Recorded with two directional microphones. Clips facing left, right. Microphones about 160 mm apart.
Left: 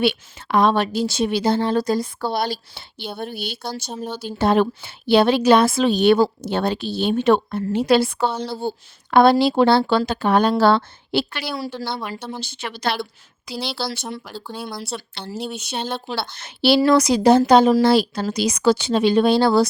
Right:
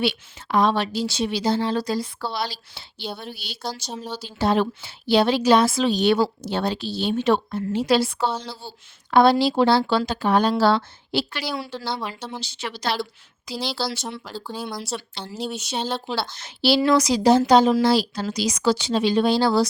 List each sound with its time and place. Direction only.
0.0 s a woman's voice: 60° left (ahead or behind)
11.8 s speech: 10° left (ahead or behind)
12.4 s speech: 55° left (ahead or behind)
14.4 s speech: 5° right (ahead or behind)
15.5 s speech: 60° left (ahead or behind)